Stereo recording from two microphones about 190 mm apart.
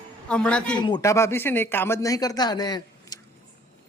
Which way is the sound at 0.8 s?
25° left (ahead or behind).